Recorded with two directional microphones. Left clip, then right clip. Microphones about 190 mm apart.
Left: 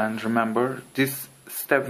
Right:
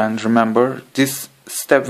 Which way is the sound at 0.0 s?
30° right (ahead or behind).